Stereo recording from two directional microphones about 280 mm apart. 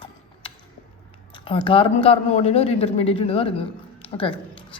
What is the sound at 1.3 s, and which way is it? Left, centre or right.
A man's voice, centre.